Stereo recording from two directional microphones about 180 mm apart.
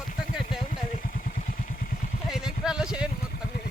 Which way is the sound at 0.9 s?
50° left (ahead or behind).